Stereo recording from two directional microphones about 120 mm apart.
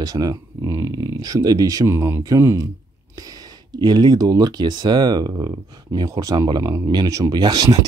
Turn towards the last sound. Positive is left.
turn(degrees=-35)  # may be behind; listen again after turning